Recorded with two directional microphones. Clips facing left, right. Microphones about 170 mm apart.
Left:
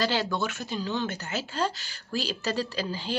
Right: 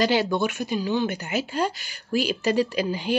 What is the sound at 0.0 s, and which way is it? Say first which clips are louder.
Speech: right 6 dB; 15° right (ahead or behind).